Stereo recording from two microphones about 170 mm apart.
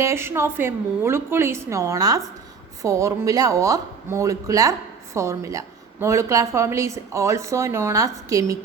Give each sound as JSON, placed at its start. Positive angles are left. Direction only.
{"t": 0.0, "sound": "a woman's voice", "side_deg": -15}